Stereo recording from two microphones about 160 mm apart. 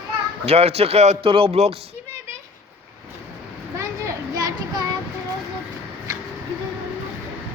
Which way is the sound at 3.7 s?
20° right (ahead or behind).